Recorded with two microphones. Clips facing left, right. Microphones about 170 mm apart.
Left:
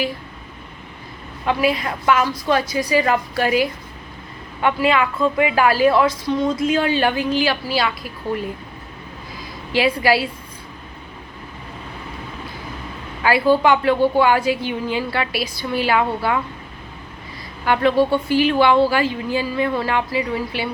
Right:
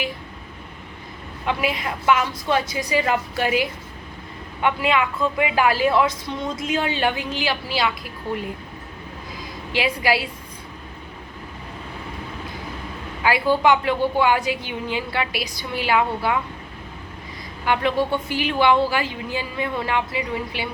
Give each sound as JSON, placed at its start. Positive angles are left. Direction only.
{"t": 1.6, "sound": "a woman's voice", "side_deg": -20}
{"t": 9.7, "sound": "a woman's voice", "side_deg": -20}
{"t": 13.2, "sound": "a woman's voice", "side_deg": -20}
{"t": 17.7, "sound": "a woman's voice", "side_deg": -20}